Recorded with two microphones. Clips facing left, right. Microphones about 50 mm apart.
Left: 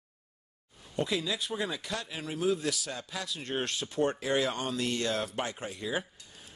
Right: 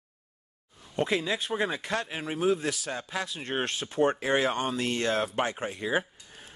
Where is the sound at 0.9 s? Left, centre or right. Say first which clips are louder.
Right 4 dB; right.